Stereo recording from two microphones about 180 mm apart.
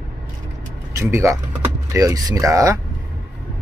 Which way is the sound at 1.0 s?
15° right (ahead or behind).